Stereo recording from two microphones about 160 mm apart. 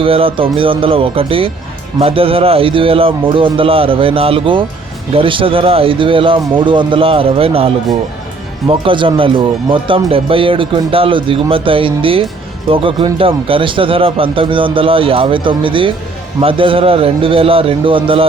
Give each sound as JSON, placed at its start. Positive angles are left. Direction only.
{"t": 0.0, "sound": "speech", "side_deg": -35}
{"t": 8.8, "sound": "speech", "side_deg": -35}